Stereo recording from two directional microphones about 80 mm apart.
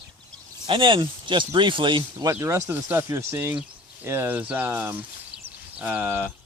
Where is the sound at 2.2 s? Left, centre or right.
Right.